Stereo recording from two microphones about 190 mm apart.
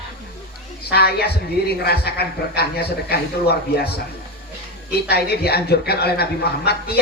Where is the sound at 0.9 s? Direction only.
55° left (ahead or behind).